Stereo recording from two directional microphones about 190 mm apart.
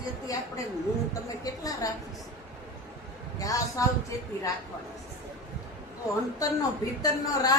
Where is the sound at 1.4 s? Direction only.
20° left (ahead or behind).